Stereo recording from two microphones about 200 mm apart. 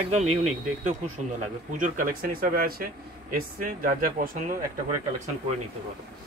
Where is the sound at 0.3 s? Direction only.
35° right (ahead or behind).